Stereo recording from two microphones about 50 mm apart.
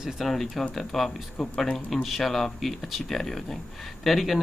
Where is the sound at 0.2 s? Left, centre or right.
Centre.